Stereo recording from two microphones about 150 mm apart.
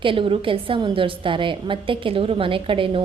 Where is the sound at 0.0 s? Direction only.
35° right (ahead or behind).